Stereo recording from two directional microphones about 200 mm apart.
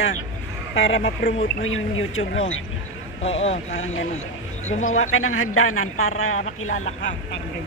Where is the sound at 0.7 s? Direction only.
75° left (ahead or behind).